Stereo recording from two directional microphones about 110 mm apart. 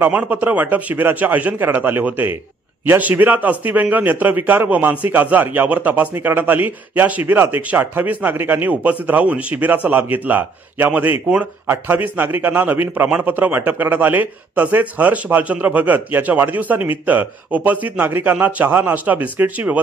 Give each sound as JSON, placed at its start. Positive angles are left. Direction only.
{"t": 0.0, "sound": "a man's voice", "side_deg": -15}